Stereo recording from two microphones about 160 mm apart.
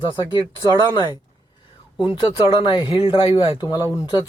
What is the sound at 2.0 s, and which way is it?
Speech, 30° left (ahead or behind).